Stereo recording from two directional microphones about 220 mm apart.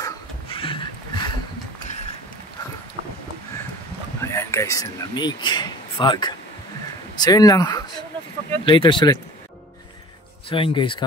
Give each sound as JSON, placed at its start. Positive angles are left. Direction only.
{"t": 0.0, "sound": "a sound", "side_deg": 25}
{"t": 4.2, "sound": "speech", "side_deg": 10}
{"t": 10.5, "sound": "speech", "side_deg": 20}